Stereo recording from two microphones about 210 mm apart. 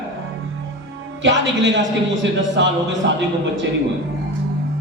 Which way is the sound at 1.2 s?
60° right (ahead or behind).